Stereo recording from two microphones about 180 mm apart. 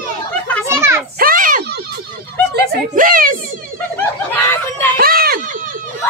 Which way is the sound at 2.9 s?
50° right (ahead or behind).